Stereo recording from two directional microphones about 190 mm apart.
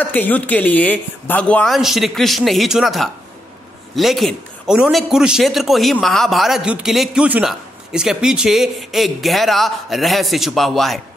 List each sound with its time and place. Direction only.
0.0 s a man's voice: 10° left (ahead or behind)